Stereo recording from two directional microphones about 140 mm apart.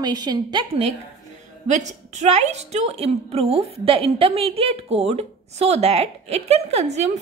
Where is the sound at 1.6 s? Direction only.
60° right (ahead or behind).